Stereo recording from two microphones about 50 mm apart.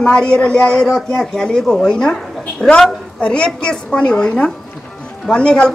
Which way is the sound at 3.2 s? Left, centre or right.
Centre.